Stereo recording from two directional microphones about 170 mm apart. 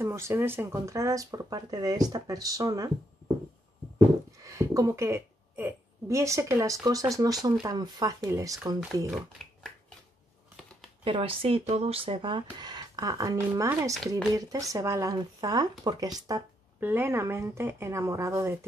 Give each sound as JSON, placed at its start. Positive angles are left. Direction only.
{"t": 0.0, "sound": "speech", "side_deg": -15}
{"t": 4.4, "sound": "a woman's voice", "side_deg": -20}
{"t": 11.1, "sound": "speech", "side_deg": -35}